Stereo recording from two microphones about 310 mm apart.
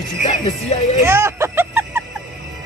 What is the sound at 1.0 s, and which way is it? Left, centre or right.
Music, centre.